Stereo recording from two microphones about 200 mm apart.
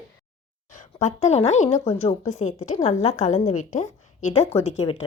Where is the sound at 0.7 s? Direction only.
35° left (ahead or behind).